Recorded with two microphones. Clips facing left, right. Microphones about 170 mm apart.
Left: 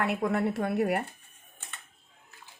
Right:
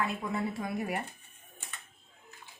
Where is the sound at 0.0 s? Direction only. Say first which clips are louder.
Left 5 dB; 70° left (ahead or behind).